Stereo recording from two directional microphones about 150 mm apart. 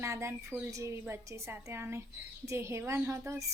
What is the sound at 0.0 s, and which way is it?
A woman's voice, 15° right (ahead or behind).